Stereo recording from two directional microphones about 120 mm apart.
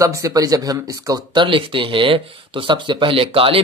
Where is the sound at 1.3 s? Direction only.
45° right (ahead or behind).